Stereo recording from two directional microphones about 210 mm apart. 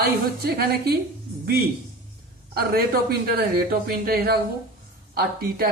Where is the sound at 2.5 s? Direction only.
45° right (ahead or behind).